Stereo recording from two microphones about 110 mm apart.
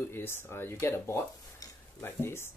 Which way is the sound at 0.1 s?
20° left (ahead or behind).